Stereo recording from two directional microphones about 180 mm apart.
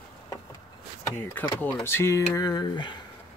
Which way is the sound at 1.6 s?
10° left (ahead or behind).